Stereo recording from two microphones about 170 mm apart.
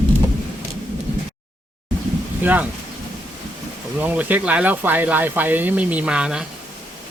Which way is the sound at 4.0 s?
10° right (ahead or behind).